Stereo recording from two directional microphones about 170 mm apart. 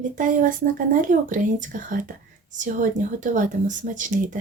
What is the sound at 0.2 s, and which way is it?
Speech, 50° right (ahead or behind).